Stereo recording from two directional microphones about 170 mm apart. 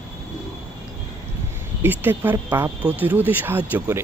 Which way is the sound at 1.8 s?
10° right (ahead or behind).